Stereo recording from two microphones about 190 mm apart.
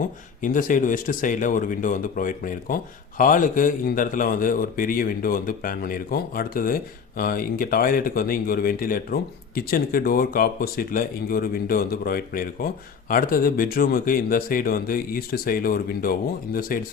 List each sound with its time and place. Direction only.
0.4 s speech: 45° left (ahead or behind)